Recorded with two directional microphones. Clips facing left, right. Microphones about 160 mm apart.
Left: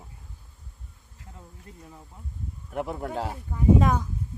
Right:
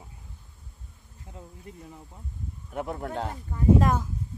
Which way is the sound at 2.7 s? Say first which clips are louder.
Left 1 dB; centre (ahead or behind).